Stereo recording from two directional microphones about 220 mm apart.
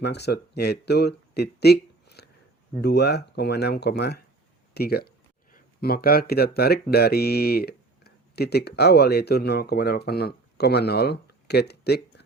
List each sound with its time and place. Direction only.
0.0 s speech: 50° left (ahead or behind)